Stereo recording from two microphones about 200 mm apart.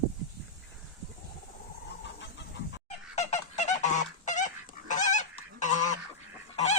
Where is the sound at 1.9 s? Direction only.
60° left (ahead or behind).